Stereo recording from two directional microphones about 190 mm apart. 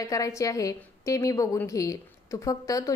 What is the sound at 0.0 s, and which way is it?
A woman's voice, 15° left (ahead or behind).